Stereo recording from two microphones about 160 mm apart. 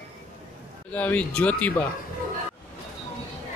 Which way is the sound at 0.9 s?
10° left (ahead or behind).